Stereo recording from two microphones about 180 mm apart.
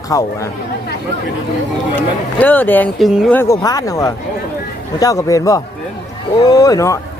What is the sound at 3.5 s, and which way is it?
Speech, 20° left (ahead or behind).